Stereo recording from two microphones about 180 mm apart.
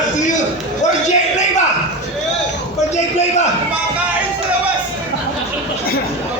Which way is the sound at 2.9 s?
40° left (ahead or behind).